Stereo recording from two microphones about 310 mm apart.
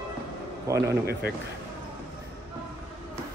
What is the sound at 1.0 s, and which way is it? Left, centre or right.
Speech, right.